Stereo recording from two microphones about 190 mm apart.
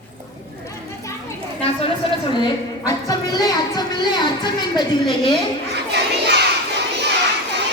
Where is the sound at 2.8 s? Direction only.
20° left (ahead or behind).